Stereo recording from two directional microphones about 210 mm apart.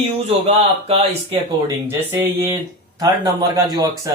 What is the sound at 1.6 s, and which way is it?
Speech, 10° right (ahead or behind).